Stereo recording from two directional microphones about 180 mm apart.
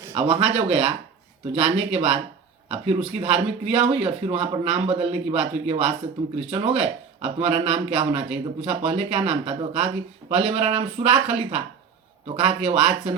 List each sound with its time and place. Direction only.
0.1 s speech: 30° right (ahead or behind)